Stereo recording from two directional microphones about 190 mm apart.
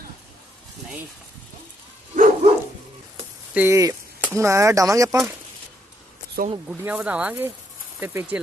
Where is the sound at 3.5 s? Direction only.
15° right (ahead or behind).